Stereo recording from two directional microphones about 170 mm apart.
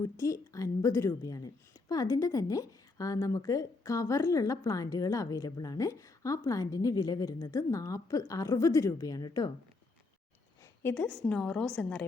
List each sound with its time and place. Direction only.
0.0 s a woman's voice: 20° left (ahead or behind)
10.6 s a woman's voice: 10° left (ahead or behind)